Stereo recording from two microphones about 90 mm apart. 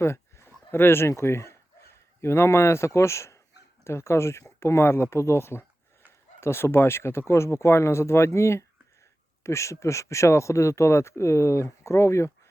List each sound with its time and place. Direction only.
0.0 s speech: 30° left (ahead or behind)